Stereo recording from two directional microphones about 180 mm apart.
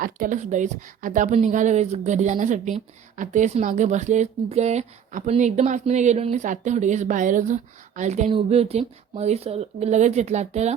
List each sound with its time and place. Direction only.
0.0 s speech: 45° right (ahead or behind)